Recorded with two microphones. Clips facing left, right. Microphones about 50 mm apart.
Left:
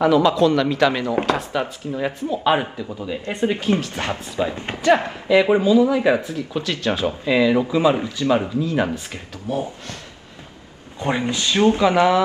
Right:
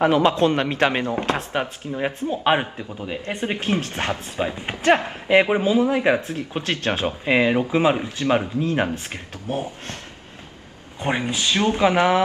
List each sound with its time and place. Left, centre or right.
0.0 s speech: right
4.5 s speech: centre
4.8 s speech: right
11.0 s speech: right